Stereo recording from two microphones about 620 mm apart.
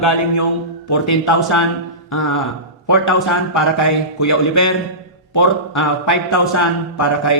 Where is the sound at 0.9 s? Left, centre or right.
Left.